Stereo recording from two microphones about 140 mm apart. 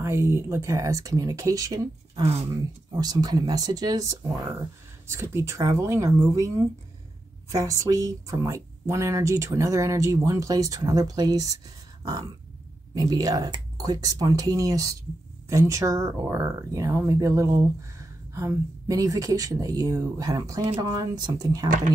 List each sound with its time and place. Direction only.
0.0 s speech: 20° right (ahead or behind)
2.2 s speech: 45° right (ahead or behind)
2.5 s speech: 25° right (ahead or behind)
7.5 s speech: 25° right (ahead or behind)
12.0 s a sound: 25° right (ahead or behind)
12.9 s speech: 25° right (ahead or behind)
21.6 s speech: 70° right (ahead or behind)